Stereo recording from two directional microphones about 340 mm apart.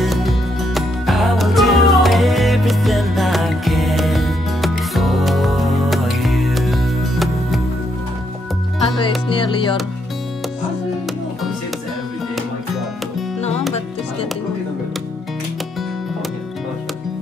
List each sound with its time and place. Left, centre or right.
0.0 s music: centre
9.3 s music: centre
13.4 s music: centre